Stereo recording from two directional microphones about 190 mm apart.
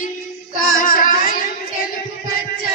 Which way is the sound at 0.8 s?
45° left (ahead or behind).